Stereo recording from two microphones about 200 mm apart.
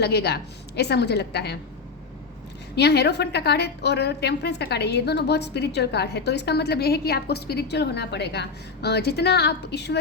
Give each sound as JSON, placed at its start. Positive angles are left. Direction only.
{"t": 0.0, "sound": "a woman's voice", "side_deg": 55}
{"t": 2.7, "sound": "a woman's voice", "side_deg": 55}